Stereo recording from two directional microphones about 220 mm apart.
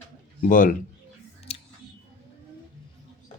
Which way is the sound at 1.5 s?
25° left (ahead or behind).